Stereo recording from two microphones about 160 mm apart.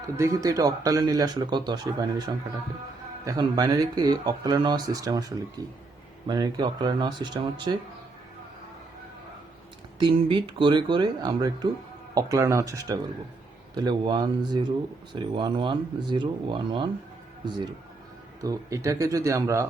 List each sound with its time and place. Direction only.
0.0 s speech: 20° right (ahead or behind)
10.0 s speech: 30° right (ahead or behind)
18.3 s speech: 20° right (ahead or behind)